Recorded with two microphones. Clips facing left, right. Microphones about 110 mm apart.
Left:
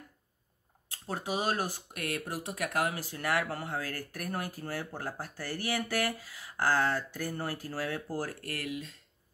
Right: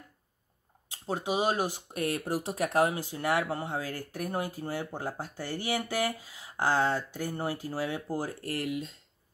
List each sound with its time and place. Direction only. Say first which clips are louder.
0.8 s speech: right 4 dB; 20° right (ahead or behind)
2.0 s speech: right 4 dB; 30° right (ahead or behind)